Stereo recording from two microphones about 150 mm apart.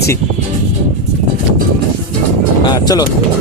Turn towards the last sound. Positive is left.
turn(degrees=25)  # may be behind; listen again after turning